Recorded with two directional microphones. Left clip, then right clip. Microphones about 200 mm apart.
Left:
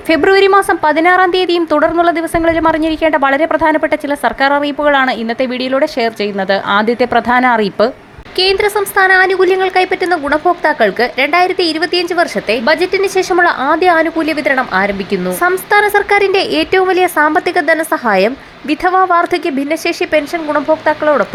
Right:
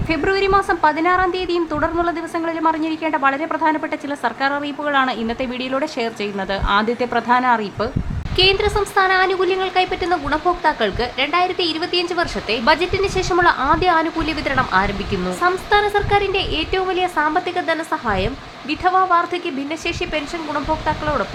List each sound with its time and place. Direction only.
0.1 s a woman's voice: 25° left (ahead or behind)